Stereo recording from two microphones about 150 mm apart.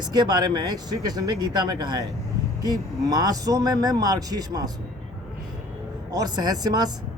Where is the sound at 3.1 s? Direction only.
25° right (ahead or behind).